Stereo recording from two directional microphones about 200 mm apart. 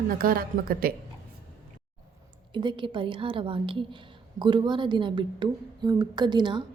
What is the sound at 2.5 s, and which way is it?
A woman's voice, 25° right (ahead or behind).